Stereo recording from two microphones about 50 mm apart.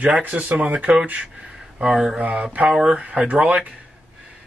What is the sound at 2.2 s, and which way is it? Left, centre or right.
Speech, right.